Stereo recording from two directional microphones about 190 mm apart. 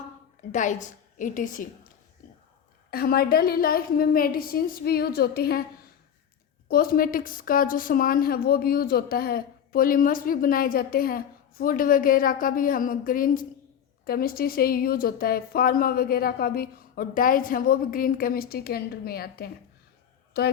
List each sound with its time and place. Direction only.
0.5 s a woman's voice: 40° left (ahead or behind)
2.2 s whispering: 45° left (ahead or behind)
2.9 s a woman's voice: 55° left (ahead or behind)
6.7 s a woman's voice: 50° left (ahead or behind)